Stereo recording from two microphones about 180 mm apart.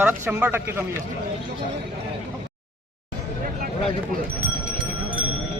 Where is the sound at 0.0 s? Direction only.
10° right (ahead or behind).